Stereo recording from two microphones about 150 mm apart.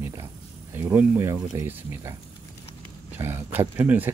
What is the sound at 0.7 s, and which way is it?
Speech, 15° right (ahead or behind).